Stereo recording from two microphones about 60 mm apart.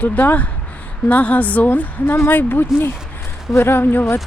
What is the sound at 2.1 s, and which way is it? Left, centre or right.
Speech, left.